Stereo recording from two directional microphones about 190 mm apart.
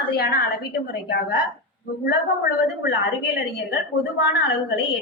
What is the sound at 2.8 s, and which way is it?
Speech, 55° left (ahead or behind).